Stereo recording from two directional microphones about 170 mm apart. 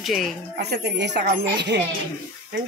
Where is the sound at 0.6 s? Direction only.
75° right (ahead or behind).